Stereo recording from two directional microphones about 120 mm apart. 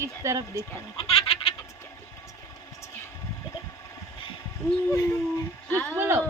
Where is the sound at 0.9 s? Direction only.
55° left (ahead or behind).